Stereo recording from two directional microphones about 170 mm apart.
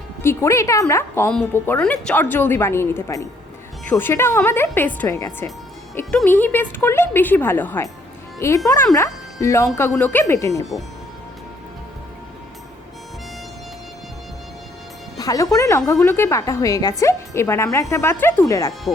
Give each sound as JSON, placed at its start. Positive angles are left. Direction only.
{"t": 0.2, "sound": "speech", "side_deg": 15}
{"t": 15.2, "sound": "speech", "side_deg": 20}